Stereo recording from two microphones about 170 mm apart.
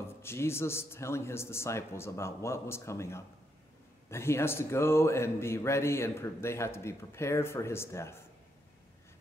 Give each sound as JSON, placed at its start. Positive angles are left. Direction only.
{"t": 0.2, "sound": "a man's voice", "side_deg": 15}